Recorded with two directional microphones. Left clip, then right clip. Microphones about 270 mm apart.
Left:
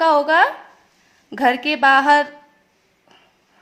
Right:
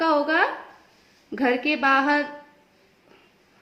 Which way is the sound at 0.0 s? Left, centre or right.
Left.